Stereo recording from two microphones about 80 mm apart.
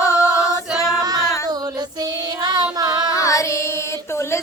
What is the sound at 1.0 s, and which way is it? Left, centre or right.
Singing, right.